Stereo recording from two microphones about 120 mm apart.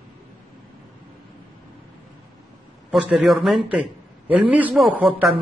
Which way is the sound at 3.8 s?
10° right (ahead or behind).